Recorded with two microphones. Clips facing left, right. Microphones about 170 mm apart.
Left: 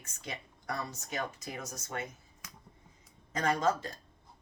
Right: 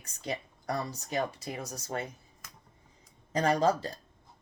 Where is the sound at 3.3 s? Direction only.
35° right (ahead or behind).